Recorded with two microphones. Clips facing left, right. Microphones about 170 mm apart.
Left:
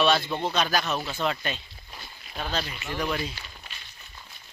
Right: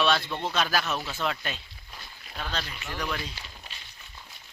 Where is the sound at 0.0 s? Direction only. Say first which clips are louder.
Left 3 dB; centre (ahead or behind).